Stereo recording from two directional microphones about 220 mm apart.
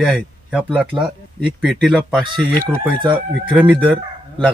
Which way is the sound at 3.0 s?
20° right (ahead or behind).